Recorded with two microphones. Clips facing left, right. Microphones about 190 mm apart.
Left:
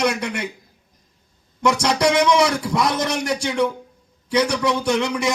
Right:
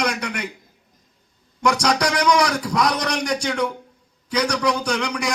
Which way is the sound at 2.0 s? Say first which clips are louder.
Left 4 dB; 25° left (ahead or behind).